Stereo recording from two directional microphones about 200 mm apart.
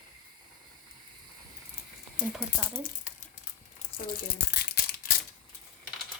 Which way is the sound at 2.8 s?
40° left (ahead or behind).